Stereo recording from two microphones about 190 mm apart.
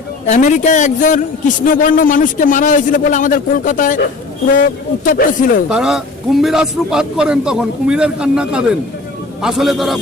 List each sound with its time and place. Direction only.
0.3 s a man's voice: 40° left (ahead or behind)
5.0 s a man's voice: 45° left (ahead or behind)
5.6 s a man's voice: 5° right (ahead or behind)